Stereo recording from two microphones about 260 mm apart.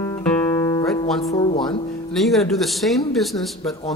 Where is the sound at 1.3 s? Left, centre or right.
Left.